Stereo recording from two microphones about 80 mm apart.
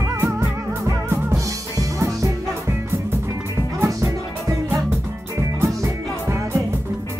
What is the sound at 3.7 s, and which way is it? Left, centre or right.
Music, right.